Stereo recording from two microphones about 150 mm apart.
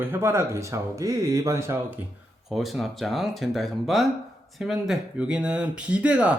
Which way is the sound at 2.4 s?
Centre (ahead or behind).